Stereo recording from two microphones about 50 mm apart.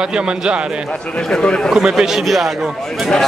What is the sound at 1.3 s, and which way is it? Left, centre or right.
Speech, centre.